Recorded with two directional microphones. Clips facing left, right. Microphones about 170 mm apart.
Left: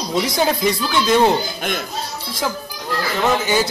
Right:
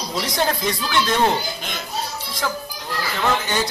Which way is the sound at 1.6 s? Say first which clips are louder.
Left 8 dB; 55° left (ahead or behind).